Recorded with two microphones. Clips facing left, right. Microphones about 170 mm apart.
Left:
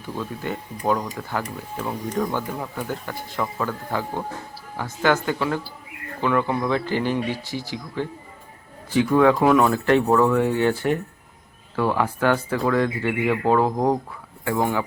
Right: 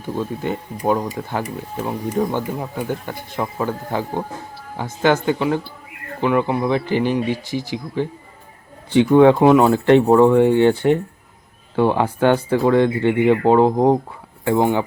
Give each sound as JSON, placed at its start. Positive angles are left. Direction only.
{"t": 0.2, "sound": "speech", "side_deg": -20}